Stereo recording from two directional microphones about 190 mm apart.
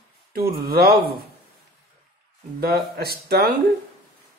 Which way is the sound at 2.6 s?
55° right (ahead or behind).